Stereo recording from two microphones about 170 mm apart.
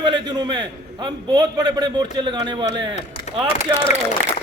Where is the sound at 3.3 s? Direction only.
40° left (ahead or behind).